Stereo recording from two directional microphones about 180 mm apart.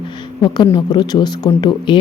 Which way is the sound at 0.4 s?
25° left (ahead or behind).